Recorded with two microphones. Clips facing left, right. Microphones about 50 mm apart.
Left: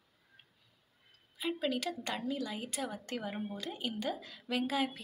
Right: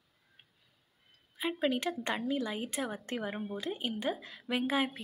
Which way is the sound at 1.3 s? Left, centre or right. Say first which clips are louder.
Right 3 dB; right.